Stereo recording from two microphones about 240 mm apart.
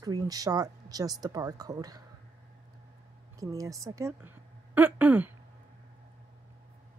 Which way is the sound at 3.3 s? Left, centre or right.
Centre.